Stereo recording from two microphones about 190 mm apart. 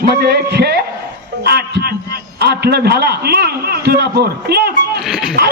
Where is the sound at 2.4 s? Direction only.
55° right (ahead or behind).